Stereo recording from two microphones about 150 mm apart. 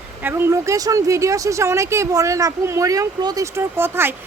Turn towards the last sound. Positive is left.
turn(degrees=-15)  # may be behind; listen again after turning